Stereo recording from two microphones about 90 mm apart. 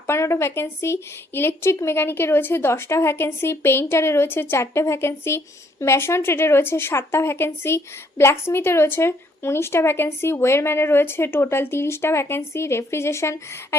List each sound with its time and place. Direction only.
0.1 s speech: 30° left (ahead or behind)